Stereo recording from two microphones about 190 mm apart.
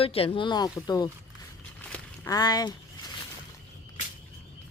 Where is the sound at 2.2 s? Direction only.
20° left (ahead or behind).